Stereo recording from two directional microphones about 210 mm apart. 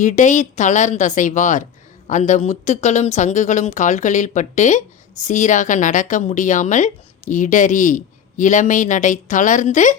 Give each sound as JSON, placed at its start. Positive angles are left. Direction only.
{"t": 0.0, "sound": "speech", "side_deg": 35}